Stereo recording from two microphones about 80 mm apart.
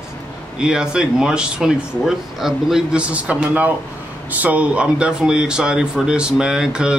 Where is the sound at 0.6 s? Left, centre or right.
Centre.